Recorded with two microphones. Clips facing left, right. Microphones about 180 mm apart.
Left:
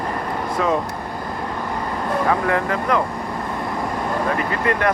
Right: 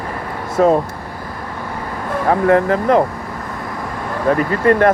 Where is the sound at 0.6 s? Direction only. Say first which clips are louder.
Right 9 dB; 45° right (ahead or behind).